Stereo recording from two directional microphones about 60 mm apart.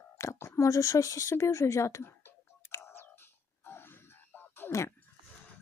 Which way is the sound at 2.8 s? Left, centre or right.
Left.